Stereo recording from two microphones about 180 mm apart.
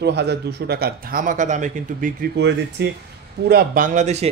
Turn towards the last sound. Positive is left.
turn(degrees=-40)  # may be behind; listen again after turning